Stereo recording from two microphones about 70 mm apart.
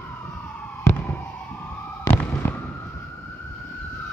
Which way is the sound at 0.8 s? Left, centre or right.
Left.